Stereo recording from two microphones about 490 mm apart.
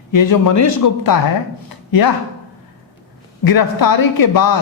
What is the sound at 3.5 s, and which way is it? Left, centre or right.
A man's voice, left.